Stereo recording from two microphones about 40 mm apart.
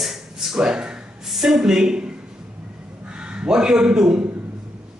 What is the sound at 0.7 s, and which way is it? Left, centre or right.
Speech, right.